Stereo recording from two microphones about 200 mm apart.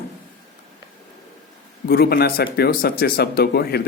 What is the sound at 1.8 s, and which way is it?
Speech, 50° left (ahead or behind).